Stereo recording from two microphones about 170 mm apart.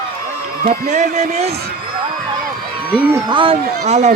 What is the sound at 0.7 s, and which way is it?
Speech, 45° right (ahead or behind).